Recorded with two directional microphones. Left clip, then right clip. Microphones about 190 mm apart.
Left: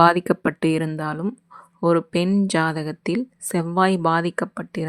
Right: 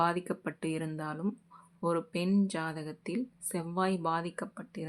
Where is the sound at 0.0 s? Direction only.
50° left (ahead or behind).